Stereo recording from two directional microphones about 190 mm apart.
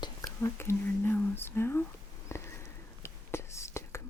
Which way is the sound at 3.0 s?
15° left (ahead or behind).